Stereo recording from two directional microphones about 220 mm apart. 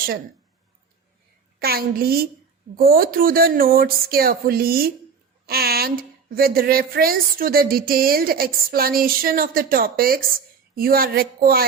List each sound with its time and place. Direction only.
1.5 s speech: 45° right (ahead or behind)